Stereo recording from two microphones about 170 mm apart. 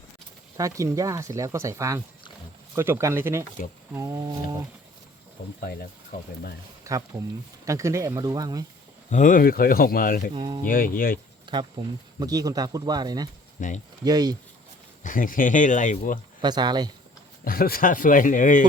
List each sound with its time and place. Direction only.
0.5 s speech: 20° right (ahead or behind)
5.4 s speech: 60° left (ahead or behind)
6.8 s speech: 20° right (ahead or behind)
9.0 s speech: 50° left (ahead or behind)
10.3 s speech: 25° right (ahead or behind)
10.7 s speech: 55° left (ahead or behind)
11.4 s speech: 25° right (ahead or behind)
13.6 s speech: 50° left (ahead or behind)
14.0 s speech: 25° right (ahead or behind)
15.0 s speech: 55° left (ahead or behind)
16.4 s speech: 25° right (ahead or behind)
17.4 s speech: 60° left (ahead or behind)